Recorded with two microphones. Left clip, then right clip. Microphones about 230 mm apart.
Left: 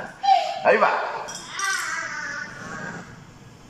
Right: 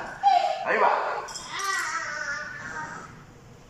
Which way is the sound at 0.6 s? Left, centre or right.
Left.